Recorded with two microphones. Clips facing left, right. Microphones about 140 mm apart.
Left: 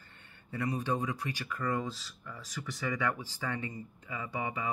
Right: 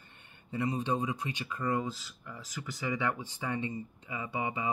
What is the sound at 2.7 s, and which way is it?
Speech, 25° right (ahead or behind).